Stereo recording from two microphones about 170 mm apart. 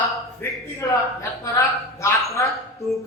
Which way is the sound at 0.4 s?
15° left (ahead or behind).